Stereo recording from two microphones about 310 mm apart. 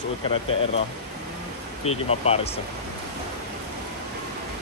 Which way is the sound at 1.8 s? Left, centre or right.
Centre.